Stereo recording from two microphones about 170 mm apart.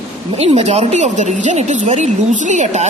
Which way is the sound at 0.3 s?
40° right (ahead or behind).